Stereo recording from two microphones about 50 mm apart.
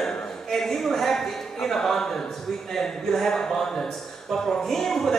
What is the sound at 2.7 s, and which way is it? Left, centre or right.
Speech, centre.